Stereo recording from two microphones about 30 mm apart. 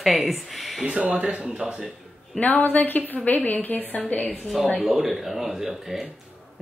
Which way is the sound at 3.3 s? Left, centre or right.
Left.